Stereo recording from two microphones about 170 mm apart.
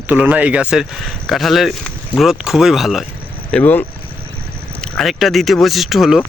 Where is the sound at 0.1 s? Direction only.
10° right (ahead or behind).